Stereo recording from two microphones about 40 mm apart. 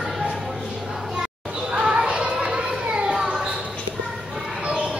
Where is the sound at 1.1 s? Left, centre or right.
Right.